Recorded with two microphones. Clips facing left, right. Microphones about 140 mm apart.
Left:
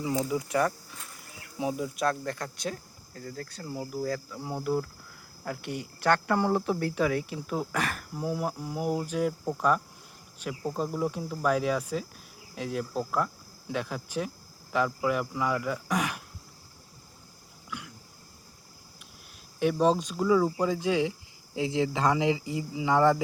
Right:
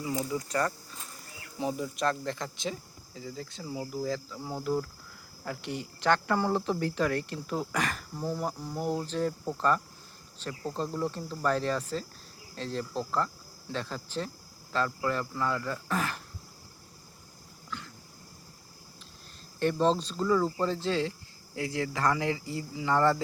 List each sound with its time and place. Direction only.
0.0 s speech: 20° left (ahead or behind)
17.7 s throat clearing: 10° left (ahead or behind)
19.5 s speech: 10° left (ahead or behind)